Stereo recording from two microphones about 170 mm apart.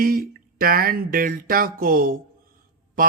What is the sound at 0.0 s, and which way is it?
Speech, 60° right (ahead or behind).